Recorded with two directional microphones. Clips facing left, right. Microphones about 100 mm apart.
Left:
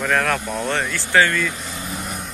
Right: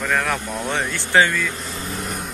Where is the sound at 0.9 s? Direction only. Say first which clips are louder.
Right 1 dB; 20° right (ahead or behind).